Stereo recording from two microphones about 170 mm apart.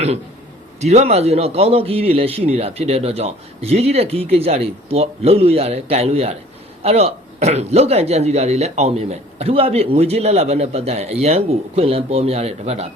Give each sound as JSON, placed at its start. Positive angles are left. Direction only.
{"t": 0.8, "sound": "speech", "side_deg": -40}